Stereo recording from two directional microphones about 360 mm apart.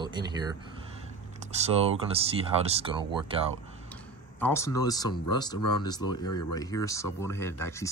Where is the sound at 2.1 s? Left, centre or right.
Centre.